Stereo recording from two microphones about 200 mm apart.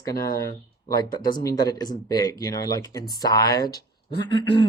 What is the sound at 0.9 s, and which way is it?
Speech, 20° left (ahead or behind).